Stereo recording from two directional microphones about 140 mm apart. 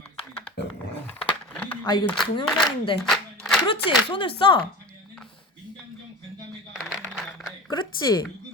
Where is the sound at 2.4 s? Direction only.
5° left (ahead or behind).